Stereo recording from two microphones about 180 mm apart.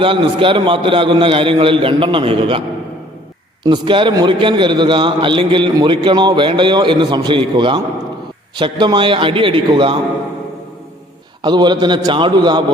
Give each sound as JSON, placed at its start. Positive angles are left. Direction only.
{"t": 0.0, "sound": "a man's voice", "side_deg": -30}
{"t": 3.6, "sound": "a man's voice", "side_deg": -25}
{"t": 11.4, "sound": "a man's voice", "side_deg": -25}